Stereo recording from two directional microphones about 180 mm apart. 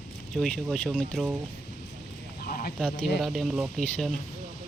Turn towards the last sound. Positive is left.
turn(degrees=5)  # may be behind; listen again after turning